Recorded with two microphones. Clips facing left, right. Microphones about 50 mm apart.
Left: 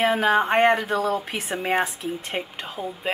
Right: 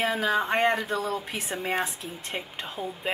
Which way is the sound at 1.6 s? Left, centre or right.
Left.